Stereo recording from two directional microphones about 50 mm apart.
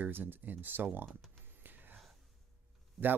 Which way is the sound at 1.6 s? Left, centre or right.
Right.